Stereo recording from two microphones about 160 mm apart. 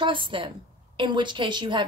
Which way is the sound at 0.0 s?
30° right (ahead or behind).